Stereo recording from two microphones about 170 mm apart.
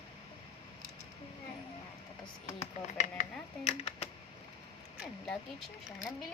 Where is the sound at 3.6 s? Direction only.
40° left (ahead or behind).